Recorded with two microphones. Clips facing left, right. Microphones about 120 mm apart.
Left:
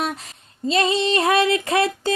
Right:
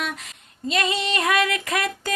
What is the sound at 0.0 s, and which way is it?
Female singing, 30° left (ahead or behind).